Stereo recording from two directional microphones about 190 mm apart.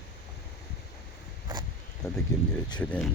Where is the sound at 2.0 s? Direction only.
15° left (ahead or behind).